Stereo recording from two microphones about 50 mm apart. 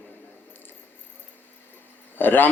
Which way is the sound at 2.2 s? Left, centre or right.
Left.